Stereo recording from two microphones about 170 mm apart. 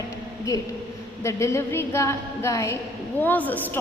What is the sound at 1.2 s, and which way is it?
A woman's voice, 15° left (ahead or behind).